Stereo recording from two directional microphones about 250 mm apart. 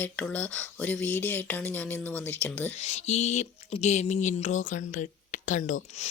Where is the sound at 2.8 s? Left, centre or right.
Left.